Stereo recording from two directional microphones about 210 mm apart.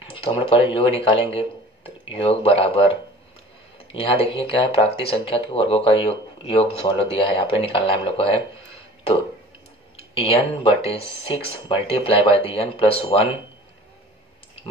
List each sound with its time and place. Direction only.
0.0 s speech: 25° left (ahead or behind)
9.9 s speech: 25° left (ahead or behind)